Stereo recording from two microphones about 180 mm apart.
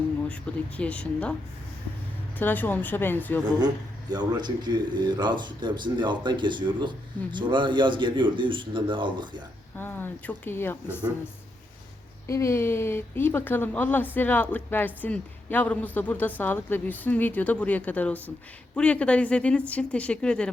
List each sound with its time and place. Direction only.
0.5 s speech: 5° left (ahead or behind)
2.4 s speech: 10° left (ahead or behind)
4.1 s a man's voice: 25° right (ahead or behind)
9.7 s speech: 10° left (ahead or behind)
12.3 s speech: 15° left (ahead or behind)